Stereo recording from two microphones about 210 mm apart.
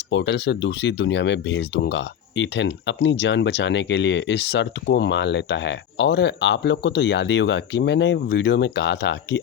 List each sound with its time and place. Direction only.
0.1 s speech: 60° left (ahead or behind)